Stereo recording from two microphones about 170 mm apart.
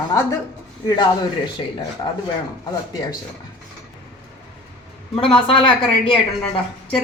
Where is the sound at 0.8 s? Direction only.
25° left (ahead or behind).